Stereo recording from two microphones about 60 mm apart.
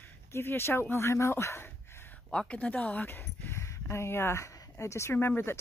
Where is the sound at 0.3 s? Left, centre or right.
Left.